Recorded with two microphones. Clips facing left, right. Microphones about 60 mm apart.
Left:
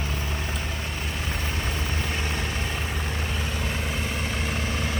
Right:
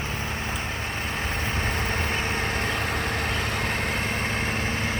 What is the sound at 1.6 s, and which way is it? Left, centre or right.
Vehicle, right.